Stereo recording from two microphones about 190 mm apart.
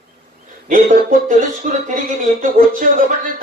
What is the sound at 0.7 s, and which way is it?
A man's voice, 45° right (ahead or behind).